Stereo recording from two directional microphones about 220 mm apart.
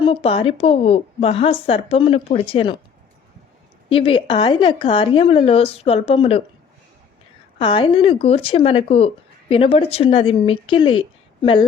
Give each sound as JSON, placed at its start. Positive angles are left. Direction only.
{"t": 0.0, "sound": "a woman's voice", "side_deg": 25}
{"t": 3.8, "sound": "a woman's voice", "side_deg": 25}
{"t": 7.6, "sound": "a woman's voice", "side_deg": 25}